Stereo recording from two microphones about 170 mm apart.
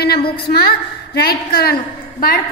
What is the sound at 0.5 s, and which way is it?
A woman's voice, 65° left (ahead or behind).